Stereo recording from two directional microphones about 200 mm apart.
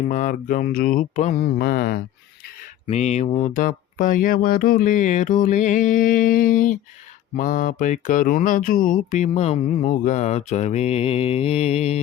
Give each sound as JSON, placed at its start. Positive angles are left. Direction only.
{"t": 0.1, "sound": "mantra", "side_deg": 40}
{"t": 2.8, "sound": "speech", "side_deg": 35}